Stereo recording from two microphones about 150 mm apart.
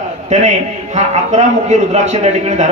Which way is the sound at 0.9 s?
50° right (ahead or behind).